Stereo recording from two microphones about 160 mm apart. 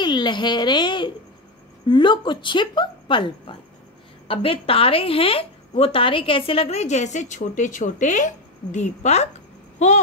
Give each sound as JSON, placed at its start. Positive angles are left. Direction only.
{"t": 0.0, "sound": "a woman's voice", "side_deg": 30}